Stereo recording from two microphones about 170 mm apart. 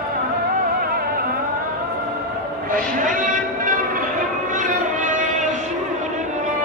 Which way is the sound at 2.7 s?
50° right (ahead or behind).